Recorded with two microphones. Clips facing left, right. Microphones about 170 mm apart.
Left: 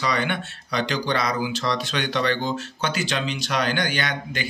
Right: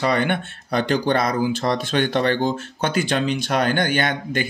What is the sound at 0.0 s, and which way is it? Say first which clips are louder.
Speech: right 4 dB; 55° right (ahead or behind).